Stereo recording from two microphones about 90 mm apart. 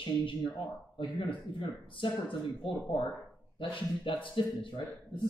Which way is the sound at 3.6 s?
70° left (ahead or behind).